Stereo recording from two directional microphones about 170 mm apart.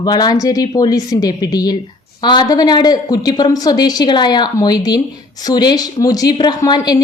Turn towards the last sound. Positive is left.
turn(degrees=25)  # may be behind; listen again after turning